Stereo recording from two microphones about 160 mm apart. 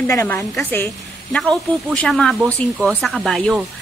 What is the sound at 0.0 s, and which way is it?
A woman's voice, 15° left (ahead or behind).